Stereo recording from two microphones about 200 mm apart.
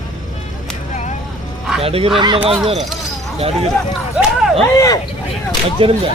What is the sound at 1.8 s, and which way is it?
Speech, 30° right (ahead or behind).